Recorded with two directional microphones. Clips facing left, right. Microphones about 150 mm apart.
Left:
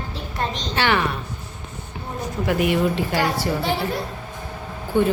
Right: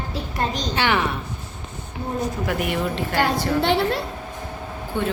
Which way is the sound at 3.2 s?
70° right (ahead or behind).